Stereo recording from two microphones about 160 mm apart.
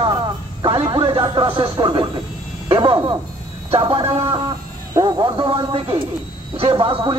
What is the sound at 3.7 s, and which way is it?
Speech, 35° right (ahead or behind).